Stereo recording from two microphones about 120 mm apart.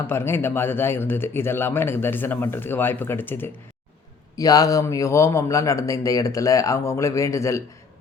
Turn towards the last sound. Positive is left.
turn(degrees=25)  # may be behind; listen again after turning